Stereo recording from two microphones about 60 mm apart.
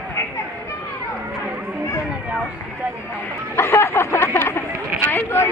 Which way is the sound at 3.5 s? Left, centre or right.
Left.